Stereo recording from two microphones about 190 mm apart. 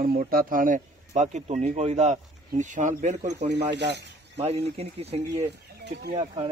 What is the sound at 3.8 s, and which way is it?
Speech, 65° right (ahead or behind).